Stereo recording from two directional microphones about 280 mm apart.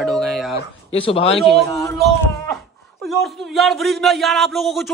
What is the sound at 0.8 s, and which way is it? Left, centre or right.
Speech, centre.